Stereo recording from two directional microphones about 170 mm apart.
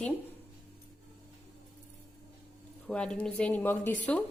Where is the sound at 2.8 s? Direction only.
5° left (ahead or behind).